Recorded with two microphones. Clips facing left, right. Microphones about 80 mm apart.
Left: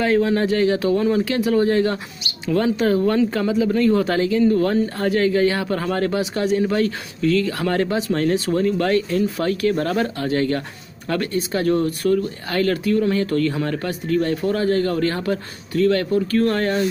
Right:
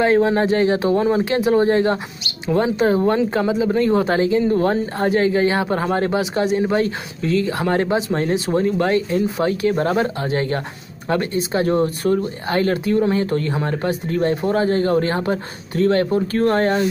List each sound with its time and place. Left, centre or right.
0.0 s speech: right